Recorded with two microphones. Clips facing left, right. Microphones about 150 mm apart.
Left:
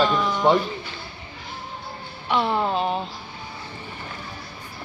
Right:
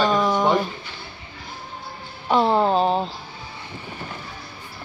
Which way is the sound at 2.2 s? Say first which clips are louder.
Right 4 dB; 35° right (ahead or behind).